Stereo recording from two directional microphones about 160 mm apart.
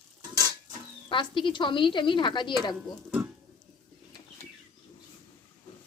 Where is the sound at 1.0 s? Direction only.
30° left (ahead or behind).